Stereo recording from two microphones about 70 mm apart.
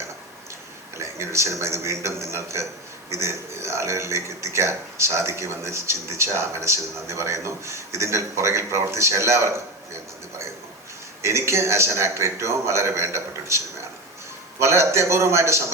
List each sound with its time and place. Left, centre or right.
0.9 s a man's voice: right
11.2 s a man's voice: right
14.6 s a man's voice: right